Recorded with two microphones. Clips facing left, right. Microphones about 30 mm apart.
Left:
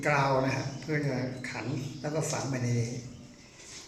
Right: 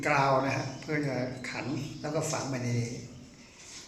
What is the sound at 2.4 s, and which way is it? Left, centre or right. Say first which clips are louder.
Speech: left 1 dB; right.